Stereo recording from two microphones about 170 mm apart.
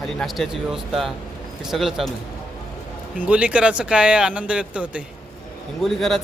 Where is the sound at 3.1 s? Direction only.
5° right (ahead or behind).